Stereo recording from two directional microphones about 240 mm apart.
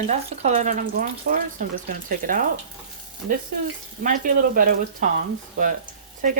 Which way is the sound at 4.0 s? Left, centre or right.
Right.